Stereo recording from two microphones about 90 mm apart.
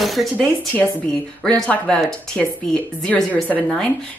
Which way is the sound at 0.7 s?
15° left (ahead or behind).